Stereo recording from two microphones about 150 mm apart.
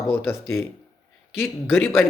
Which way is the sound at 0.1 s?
15° left (ahead or behind).